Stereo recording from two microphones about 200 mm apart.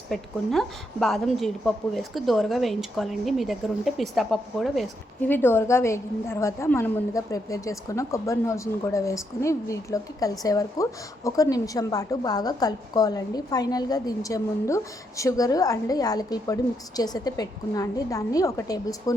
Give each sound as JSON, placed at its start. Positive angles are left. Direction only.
{"t": 0.1, "sound": "a woman's voice", "side_deg": 0}
{"t": 5.3, "sound": "a woman's voice", "side_deg": 10}